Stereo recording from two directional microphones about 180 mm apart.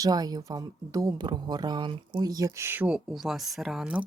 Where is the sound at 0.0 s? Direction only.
20° right (ahead or behind).